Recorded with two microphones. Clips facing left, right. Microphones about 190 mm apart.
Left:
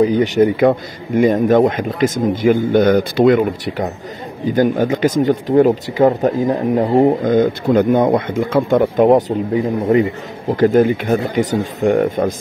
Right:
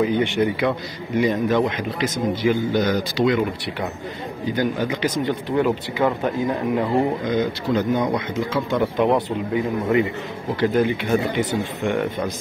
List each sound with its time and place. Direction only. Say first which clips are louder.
0.0 s a man's voice: left 7 dB; 40° left (ahead or behind)